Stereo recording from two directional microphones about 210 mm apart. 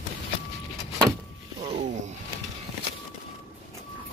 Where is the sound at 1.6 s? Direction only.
35° right (ahead or behind).